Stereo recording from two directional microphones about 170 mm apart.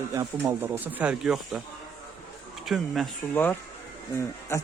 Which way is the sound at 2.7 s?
Centre (ahead or behind).